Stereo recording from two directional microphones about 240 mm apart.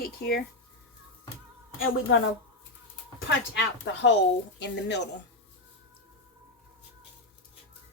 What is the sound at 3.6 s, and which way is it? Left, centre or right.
Speech, left.